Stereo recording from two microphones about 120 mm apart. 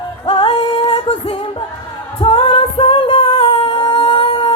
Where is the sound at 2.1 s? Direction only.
50° left (ahead or behind).